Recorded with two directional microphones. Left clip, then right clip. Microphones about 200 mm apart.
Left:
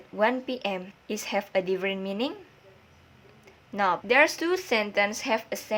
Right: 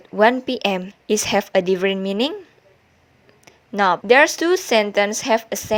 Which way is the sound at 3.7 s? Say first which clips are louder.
Right 8 dB; 40° right (ahead or behind).